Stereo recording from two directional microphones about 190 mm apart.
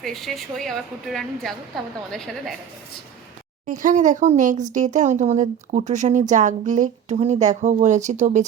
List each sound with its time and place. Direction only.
0.0 s a woman's voice: centre (ahead or behind)
3.7 s speech: 45° right (ahead or behind)